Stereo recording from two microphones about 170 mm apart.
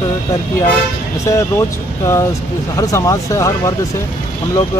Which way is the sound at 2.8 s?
20° left (ahead or behind).